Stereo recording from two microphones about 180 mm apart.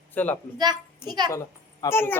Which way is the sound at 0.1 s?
10° left (ahead or behind).